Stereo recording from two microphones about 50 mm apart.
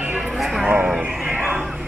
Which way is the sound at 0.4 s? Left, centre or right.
Centre.